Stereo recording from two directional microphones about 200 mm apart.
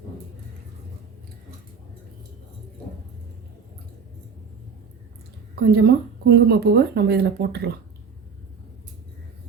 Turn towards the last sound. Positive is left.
turn(degrees=-55)  # may be behind; listen again after turning